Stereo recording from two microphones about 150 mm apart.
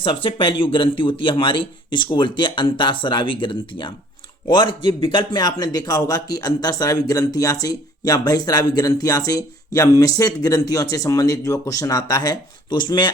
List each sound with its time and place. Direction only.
0.0 s a man's voice: 35° left (ahead or behind)